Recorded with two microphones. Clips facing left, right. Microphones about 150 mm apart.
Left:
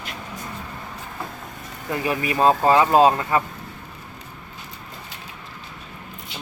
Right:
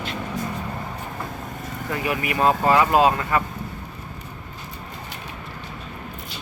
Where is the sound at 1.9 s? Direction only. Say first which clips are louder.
Left 2 dB; 30° left (ahead or behind).